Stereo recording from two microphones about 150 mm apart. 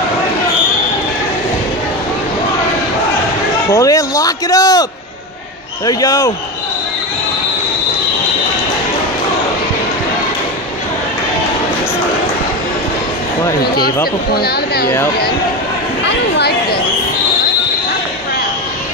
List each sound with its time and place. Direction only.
3.7 s a sound: 20° left (ahead or behind)
5.9 s a man's voice: 25° left (ahead or behind)
14.3 s speech: 90° left